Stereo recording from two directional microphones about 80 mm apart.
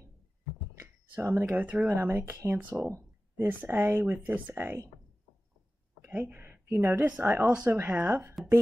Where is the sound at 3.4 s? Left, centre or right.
Right.